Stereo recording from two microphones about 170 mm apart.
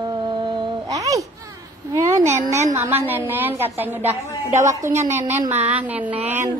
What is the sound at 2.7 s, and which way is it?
A woman's voice, 15° right (ahead or behind).